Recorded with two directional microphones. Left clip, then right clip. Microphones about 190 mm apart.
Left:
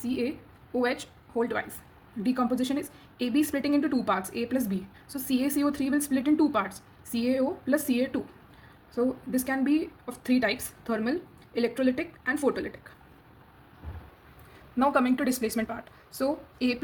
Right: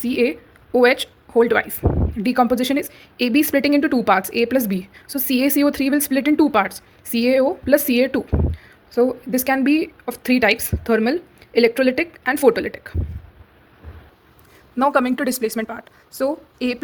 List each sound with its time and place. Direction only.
0.1 s a woman's voice: 45° right (ahead or behind)
14.8 s speech: 60° right (ahead or behind)